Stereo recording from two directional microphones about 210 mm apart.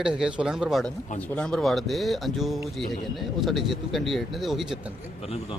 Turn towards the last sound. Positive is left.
turn(degrees=30)  # may be behind; listen again after turning